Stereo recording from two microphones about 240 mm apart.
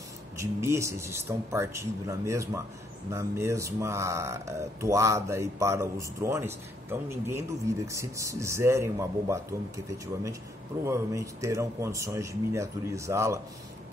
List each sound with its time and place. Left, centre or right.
0.4 s speech: centre